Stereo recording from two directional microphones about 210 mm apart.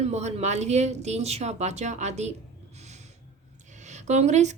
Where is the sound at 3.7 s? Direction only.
35° right (ahead or behind).